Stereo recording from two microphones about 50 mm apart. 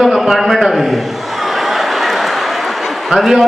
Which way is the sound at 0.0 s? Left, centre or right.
Centre.